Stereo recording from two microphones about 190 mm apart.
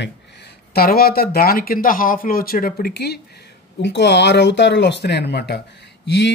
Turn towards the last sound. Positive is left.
turn(degrees=65)  # may be behind; listen again after turning